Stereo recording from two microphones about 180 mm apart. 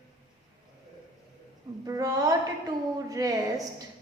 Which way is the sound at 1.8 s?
20° right (ahead or behind).